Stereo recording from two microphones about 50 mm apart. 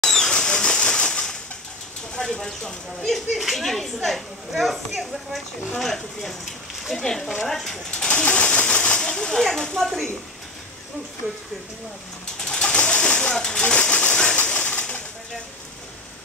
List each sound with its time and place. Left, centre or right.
0.0 s bird flight: centre
2.1 s speech: centre
6.4 s a sound: centre
7.0 s speech: centre
7.9 s a sound: left
9.1 s speech: centre
12.4 s pigeon: centre
13.7 s bird: left
14.4 s pigeon: left